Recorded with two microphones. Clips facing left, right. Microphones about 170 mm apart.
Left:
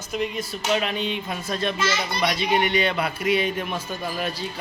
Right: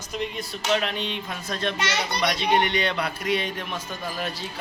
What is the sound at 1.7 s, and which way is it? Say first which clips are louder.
Speech: left 2 dB; 75° right (ahead or behind).